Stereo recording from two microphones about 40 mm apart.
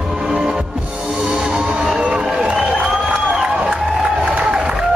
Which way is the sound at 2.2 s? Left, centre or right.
Centre.